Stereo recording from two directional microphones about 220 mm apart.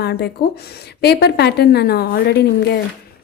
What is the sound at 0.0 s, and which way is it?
A woman's voice, 45° left (ahead or behind).